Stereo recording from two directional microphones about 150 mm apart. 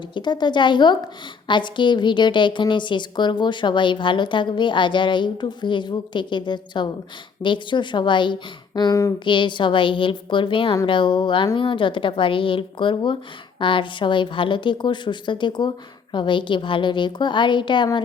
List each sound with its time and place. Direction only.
0.1 s a woman's voice: 30° left (ahead or behind)